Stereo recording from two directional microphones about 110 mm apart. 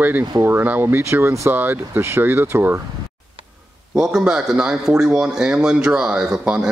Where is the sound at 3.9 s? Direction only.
5° right (ahead or behind).